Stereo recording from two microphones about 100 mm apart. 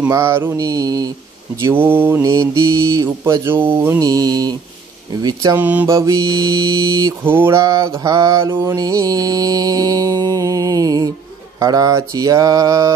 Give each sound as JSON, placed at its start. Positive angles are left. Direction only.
{"t": 0.1, "sound": "mantra", "side_deg": -25}
{"t": 1.6, "sound": "speech", "side_deg": -20}
{"t": 2.2, "sound": "mantra", "side_deg": -30}
{"t": 3.4, "sound": "speech", "side_deg": -20}
{"t": 4.0, "sound": "mantra", "side_deg": -40}
{"t": 5.6, "sound": "mantra", "side_deg": -20}
{"t": 5.9, "sound": "mantra", "side_deg": -30}
{"t": 7.2, "sound": "speech", "side_deg": -25}
{"t": 7.6, "sound": "mantra", "side_deg": -35}